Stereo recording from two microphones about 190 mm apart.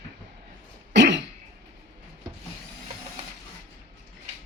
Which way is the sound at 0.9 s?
65° right (ahead or behind).